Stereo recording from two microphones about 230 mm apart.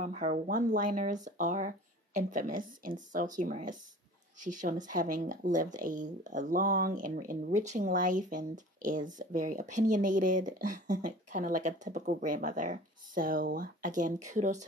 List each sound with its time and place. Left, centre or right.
0.0 s speech: right